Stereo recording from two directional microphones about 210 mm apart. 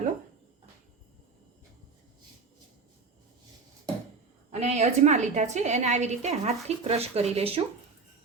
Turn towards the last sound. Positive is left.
turn(degrees=-30)  # may be behind; listen again after turning